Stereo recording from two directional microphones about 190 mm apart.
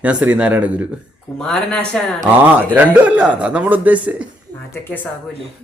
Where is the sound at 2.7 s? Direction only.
10° right (ahead or behind).